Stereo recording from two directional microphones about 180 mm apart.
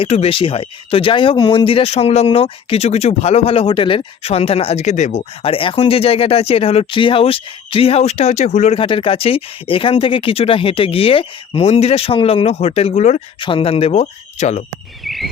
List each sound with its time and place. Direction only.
0.0 s speech: 30° left (ahead or behind)
13.4 s speech: 30° left (ahead or behind)
15.0 s a sound: centre (ahead or behind)